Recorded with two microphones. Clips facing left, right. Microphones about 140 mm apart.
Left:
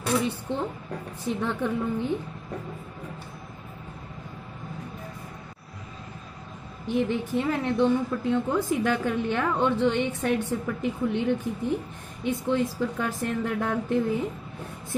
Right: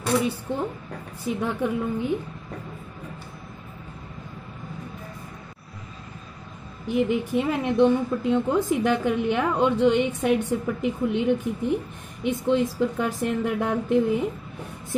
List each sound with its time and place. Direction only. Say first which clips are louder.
0.5 s a woman's voice: right 1 dB; 10° right (ahead or behind)
6.9 s a woman's voice: right 3 dB; 10° right (ahead or behind)